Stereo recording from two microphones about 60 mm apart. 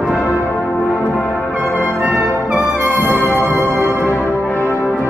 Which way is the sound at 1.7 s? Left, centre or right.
Left.